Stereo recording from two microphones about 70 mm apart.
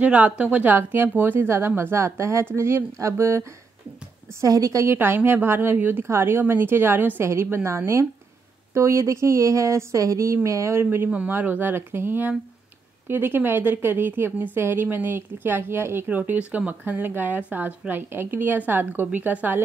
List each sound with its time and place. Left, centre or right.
0.0 s a woman's voice: centre; by 3.4 s right
4.4 s a woman's voice: right
4.9 s a woman's voice: right